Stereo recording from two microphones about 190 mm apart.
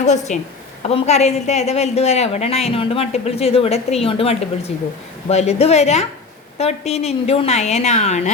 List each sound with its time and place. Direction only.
0.0 s a woman's voice: 40° left (ahead or behind)